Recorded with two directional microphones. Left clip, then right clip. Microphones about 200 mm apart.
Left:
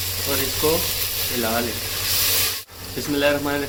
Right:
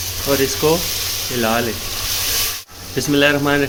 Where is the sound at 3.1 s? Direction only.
45° right (ahead or behind).